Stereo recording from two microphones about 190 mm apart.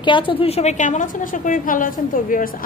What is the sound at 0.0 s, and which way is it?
A woman's voice, 25° left (ahead or behind).